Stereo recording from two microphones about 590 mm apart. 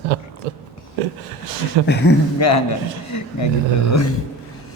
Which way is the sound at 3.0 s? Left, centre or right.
Left.